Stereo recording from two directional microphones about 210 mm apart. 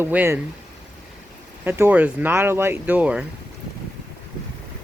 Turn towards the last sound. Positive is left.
turn(degrees=-5)  # may be behind; listen again after turning